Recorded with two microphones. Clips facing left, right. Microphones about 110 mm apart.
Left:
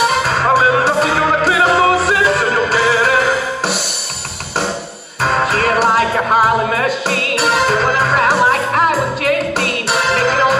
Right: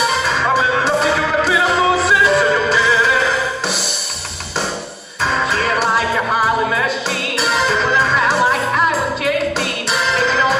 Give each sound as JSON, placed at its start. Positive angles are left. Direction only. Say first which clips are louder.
{"t": 0.2, "sound": "music", "louder": "left 3 dB", "side_deg": 50}
{"t": 5.2, "sound": "music", "louder": "left 3 dB", "side_deg": 55}